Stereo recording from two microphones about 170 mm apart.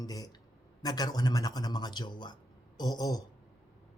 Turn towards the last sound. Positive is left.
turn(degrees=25)  # may be behind; listen again after turning